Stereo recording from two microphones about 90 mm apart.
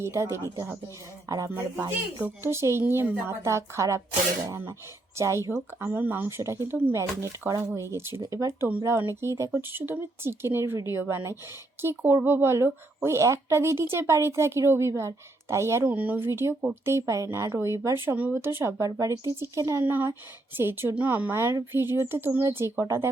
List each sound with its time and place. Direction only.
0.0 s speech: 30° right (ahead or behind)
2.4 s speech: 30° right (ahead or behind)
15.9 s speech: 20° right (ahead or behind)
19.8 s speech: 20° right (ahead or behind)